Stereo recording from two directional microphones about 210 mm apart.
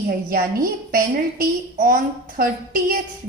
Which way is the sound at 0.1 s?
45° right (ahead or behind).